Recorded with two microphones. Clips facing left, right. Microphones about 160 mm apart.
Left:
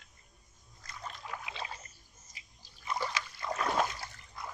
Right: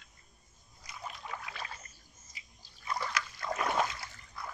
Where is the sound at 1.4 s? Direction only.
20° left (ahead or behind).